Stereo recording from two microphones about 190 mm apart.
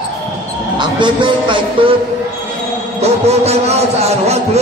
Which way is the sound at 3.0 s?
35° right (ahead or behind).